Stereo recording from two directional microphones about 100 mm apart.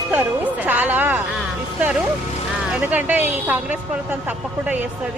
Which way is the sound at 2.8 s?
15° right (ahead or behind).